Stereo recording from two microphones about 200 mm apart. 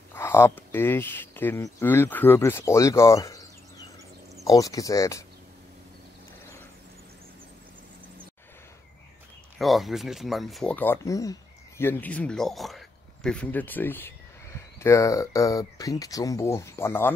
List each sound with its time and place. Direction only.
0.1 s speech: 10° left (ahead or behind)
4.5 s speech: 15° left (ahead or behind)
9.6 s speech: centre (ahead or behind)